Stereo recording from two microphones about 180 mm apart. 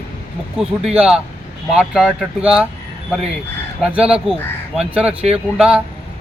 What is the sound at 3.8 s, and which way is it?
Speech, 5° right (ahead or behind).